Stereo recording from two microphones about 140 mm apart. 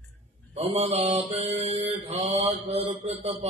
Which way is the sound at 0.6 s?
45° right (ahead or behind).